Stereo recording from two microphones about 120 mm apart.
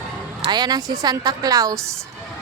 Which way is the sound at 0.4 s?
35° right (ahead or behind).